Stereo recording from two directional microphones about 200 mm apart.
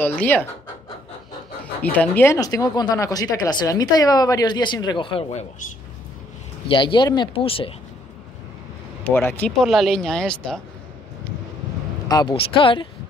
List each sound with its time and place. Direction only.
0.0 s speech: 10° left (ahead or behind)
1.8 s speech: 10° left (ahead or behind); by 5.7 s 35° left (ahead or behind)
6.7 s speech: 25° left (ahead or behind)
9.0 s speech: 10° left (ahead or behind)
12.1 s speech: 20° left (ahead or behind)